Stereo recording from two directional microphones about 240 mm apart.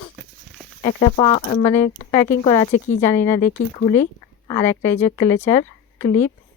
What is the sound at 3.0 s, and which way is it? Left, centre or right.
Speech, centre.